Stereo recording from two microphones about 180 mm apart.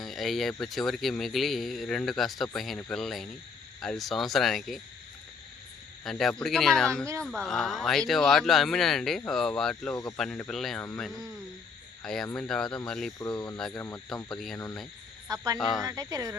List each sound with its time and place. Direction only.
0.0 s speech: centre (ahead or behind)
6.1 s speech: centre (ahead or behind)
9.9 s speech: 20° left (ahead or behind)
10.2 s speech: 5° left (ahead or behind)
13.1 s speech: 20° left (ahead or behind)
14.3 s speech: centre (ahead or behind)
15.9 s speech: 20° right (ahead or behind)